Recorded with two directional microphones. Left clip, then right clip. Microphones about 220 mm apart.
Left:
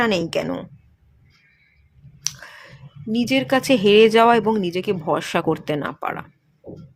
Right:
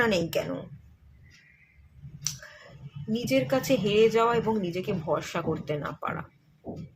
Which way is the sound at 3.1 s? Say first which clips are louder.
Left 6 dB; 40° left (ahead or behind).